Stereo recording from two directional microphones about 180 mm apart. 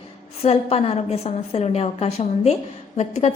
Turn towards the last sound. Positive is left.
turn(degrees=35)  # may be behind; listen again after turning